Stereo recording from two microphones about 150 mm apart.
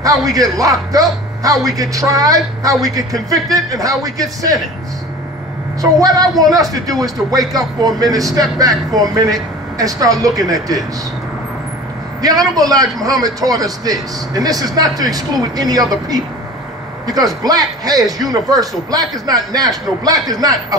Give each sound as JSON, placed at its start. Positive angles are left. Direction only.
{"t": 0.0, "sound": "a man's voice", "side_deg": -25}
{"t": 5.8, "sound": "a man's voice", "side_deg": -25}
{"t": 12.2, "sound": "a man's voice", "side_deg": -25}